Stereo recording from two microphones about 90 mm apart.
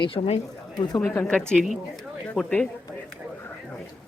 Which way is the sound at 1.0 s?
25° left (ahead or behind).